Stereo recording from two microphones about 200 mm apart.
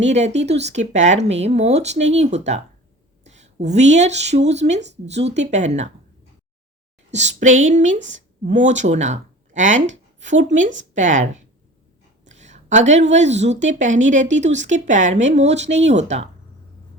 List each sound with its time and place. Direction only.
0.0 s speech: 35° right (ahead or behind)
7.1 s a woman's voice: 35° right (ahead or behind)